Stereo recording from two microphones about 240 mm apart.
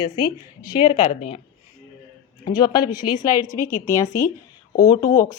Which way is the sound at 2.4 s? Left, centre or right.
Centre.